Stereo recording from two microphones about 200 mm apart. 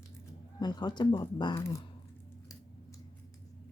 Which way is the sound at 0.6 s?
20° left (ahead or behind).